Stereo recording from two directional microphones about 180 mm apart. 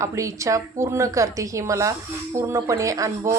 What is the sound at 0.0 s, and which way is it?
Speech, 15° right (ahead or behind).